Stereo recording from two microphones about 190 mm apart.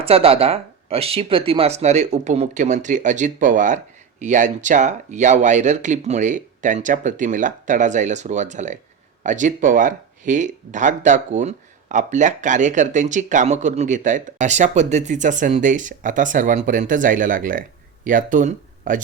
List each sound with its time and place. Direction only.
0.0 s speech: 30° right (ahead or behind)